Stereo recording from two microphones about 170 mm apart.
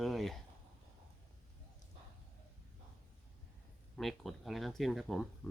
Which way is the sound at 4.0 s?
Centre (ahead or behind).